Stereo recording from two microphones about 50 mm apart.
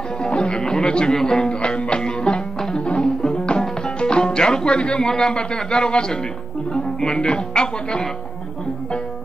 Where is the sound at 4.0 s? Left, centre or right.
Centre.